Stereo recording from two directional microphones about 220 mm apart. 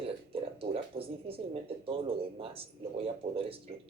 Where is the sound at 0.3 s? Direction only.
25° right (ahead or behind).